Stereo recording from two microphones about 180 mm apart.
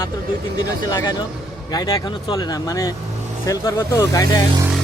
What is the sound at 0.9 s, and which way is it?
Speech, 20° left (ahead or behind).